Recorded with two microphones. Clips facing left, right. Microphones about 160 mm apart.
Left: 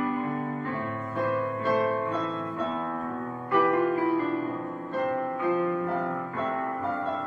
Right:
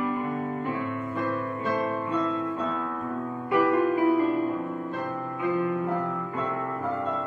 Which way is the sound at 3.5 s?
20° right (ahead or behind).